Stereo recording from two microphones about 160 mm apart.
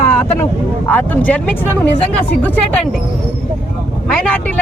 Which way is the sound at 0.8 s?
10° left (ahead or behind).